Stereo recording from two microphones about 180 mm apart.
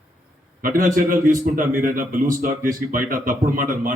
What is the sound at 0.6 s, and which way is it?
A man's voice, 50° right (ahead or behind).